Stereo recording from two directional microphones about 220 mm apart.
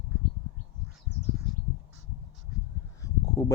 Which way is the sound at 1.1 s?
50° left (ahead or behind).